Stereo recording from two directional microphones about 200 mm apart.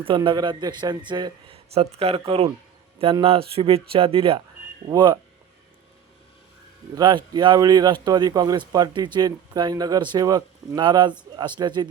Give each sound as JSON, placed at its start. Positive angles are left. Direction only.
{"t": 0.0, "sound": "speech", "side_deg": -25}
{"t": 6.9, "sound": "speech", "side_deg": -20}